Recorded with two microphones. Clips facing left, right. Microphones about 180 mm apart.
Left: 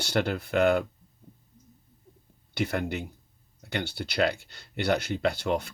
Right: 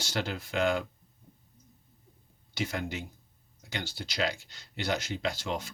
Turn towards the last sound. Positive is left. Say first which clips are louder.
# left 6 dB
turn(degrees=60)  # may be behind; listen again after turning